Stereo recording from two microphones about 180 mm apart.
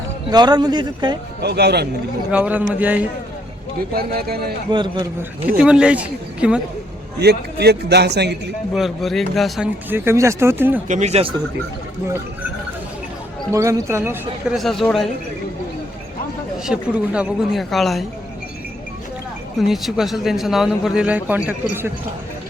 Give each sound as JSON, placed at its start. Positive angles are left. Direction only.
{"t": 0.3, "sound": "a man's voice", "side_deg": -25}
{"t": 1.4, "sound": "speech", "side_deg": -65}
{"t": 2.3, "sound": "speech", "side_deg": -10}
{"t": 3.9, "sound": "speech", "side_deg": -60}
{"t": 4.7, "sound": "a man's voice", "side_deg": -25}
{"t": 5.5, "sound": "speech", "side_deg": -5}
{"t": 7.2, "sound": "a man's voice", "side_deg": -65}
{"t": 8.7, "sound": "a man's voice", "side_deg": 0}
{"t": 9.9, "sound": "speech", "side_deg": -15}
{"t": 10.8, "sound": "speech", "side_deg": -40}
{"t": 13.5, "sound": "speech", "side_deg": -15}
{"t": 14.5, "sound": "a man's voice", "side_deg": 0}
{"t": 16.6, "sound": "a man's voice", "side_deg": -5}
{"t": 19.6, "sound": "a man's voice", "side_deg": 0}